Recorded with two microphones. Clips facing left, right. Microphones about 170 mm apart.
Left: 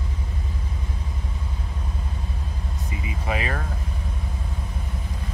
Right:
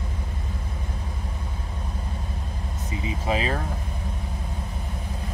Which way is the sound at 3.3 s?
25° right (ahead or behind).